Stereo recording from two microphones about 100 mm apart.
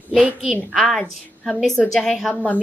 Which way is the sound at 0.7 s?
5° left (ahead or behind).